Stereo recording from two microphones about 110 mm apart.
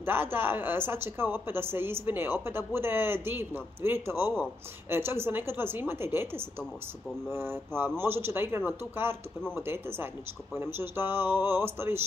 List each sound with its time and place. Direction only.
0.0 s a woman's voice: 20° right (ahead or behind)